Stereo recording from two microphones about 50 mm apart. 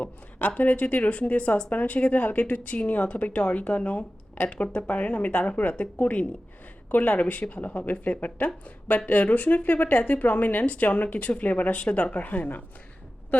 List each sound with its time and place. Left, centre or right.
0.0 s a woman's voice: left